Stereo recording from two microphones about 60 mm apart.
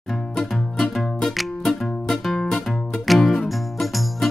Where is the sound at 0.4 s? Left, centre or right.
Centre.